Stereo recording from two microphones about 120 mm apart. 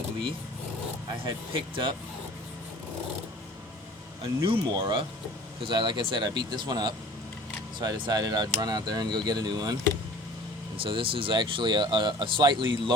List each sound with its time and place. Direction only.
1.2 s speech: 45° right (ahead or behind)
4.2 s speech: 45° right (ahead or behind)
10.8 s speech: 45° right (ahead or behind)